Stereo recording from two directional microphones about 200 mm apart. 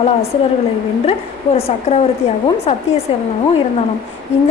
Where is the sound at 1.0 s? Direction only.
30° left (ahead or behind).